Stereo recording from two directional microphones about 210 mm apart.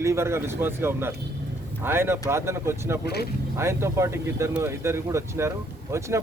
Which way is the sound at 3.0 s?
50° left (ahead or behind).